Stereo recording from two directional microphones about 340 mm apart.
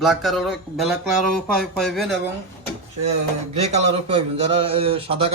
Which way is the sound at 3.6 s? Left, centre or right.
Centre.